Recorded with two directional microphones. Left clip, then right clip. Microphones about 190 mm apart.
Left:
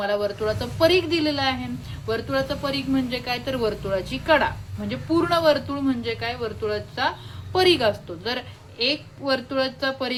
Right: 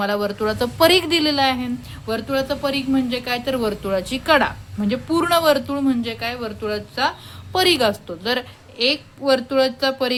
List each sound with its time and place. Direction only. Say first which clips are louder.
0.0 s a woman's voice: right 2 dB; 35° right (ahead or behind)